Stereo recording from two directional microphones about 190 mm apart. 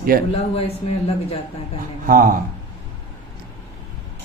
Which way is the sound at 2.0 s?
45° right (ahead or behind).